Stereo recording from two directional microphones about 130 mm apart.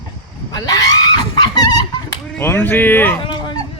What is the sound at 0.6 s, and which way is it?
Screaming, 30° left (ahead or behind).